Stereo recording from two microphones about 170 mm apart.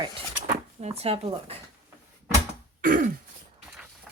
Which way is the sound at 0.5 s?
40° right (ahead or behind).